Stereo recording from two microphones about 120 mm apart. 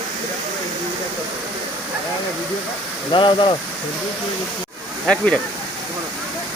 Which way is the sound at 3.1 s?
45° left (ahead or behind).